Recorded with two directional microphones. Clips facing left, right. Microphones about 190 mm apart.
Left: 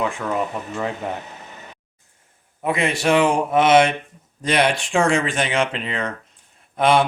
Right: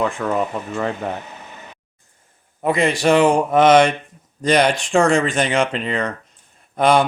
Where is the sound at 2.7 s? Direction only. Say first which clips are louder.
Right 4 dB; 40° right (ahead or behind).